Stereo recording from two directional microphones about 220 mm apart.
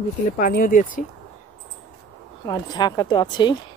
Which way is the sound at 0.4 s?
40° left (ahead or behind).